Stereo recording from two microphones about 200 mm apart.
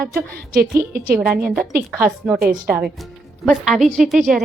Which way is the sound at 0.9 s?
45° right (ahead or behind).